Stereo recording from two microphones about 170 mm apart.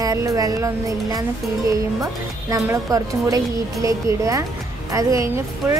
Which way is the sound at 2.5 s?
20° right (ahead or behind).